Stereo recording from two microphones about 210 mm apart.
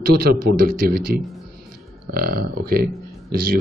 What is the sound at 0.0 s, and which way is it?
Speech, 45° right (ahead or behind).